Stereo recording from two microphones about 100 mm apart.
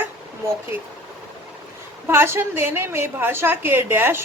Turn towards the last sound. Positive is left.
turn(degrees=-20)  # may be behind; listen again after turning